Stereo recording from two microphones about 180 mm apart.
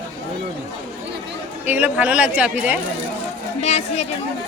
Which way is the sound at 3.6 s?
35° left (ahead or behind).